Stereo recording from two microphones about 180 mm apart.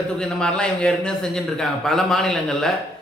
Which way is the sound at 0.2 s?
5° left (ahead or behind).